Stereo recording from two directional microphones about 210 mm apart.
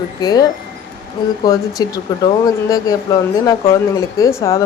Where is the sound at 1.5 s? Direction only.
20° left (ahead or behind).